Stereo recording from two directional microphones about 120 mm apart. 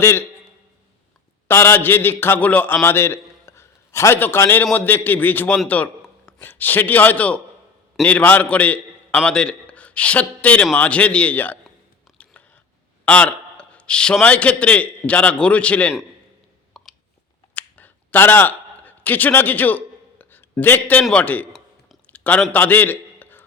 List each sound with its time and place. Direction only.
0.0 s a man's voice: 20° left (ahead or behind)
1.5 s a man's voice: 20° left (ahead or behind)
12.1 s biting: 10° left (ahead or behind)
13.1 s a man's voice: 10° left (ahead or behind)
16.7 s a sound: centre (ahead or behind)
17.5 s finger snapping: 15° left (ahead or behind)
21.0 s a man's voice: 10° left (ahead or behind)
22.0 s a sound: 15° left (ahead or behind)